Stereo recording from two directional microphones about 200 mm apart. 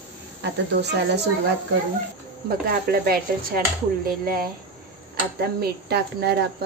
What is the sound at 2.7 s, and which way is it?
Speech, 45° right (ahead or behind).